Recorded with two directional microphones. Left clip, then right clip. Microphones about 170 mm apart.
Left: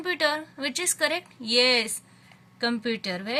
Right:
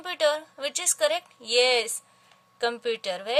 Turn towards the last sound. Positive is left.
turn(degrees=-45)  # may be behind; listen again after turning